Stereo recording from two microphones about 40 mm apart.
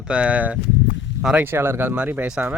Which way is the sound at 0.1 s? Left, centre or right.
Right.